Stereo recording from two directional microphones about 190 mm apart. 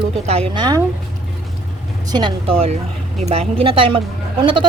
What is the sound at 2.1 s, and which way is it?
Speech, 25° right (ahead or behind).